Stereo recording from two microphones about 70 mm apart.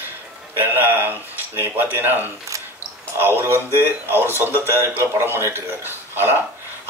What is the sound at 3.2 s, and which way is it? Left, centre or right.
A man's voice, right.